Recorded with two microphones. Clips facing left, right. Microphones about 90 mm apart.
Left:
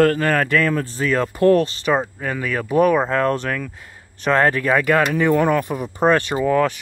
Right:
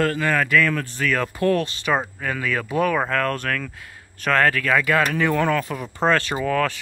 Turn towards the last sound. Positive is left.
turn(degrees=15)  # may be behind; listen again after turning